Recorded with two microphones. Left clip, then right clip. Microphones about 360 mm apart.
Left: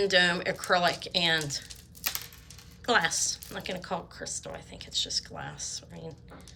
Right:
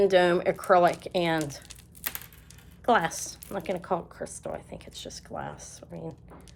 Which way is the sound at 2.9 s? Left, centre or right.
Centre.